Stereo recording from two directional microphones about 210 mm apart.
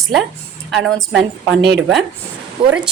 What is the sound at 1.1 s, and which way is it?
Speech, 55° right (ahead or behind).